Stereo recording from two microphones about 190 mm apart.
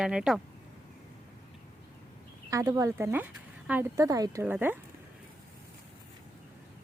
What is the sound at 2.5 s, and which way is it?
Speech, 20° right (ahead or behind).